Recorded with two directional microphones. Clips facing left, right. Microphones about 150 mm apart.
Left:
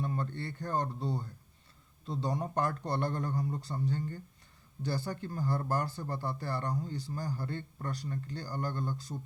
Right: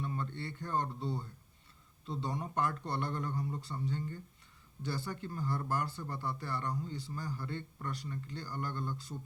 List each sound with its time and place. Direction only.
0.0 s speech: 40° left (ahead or behind)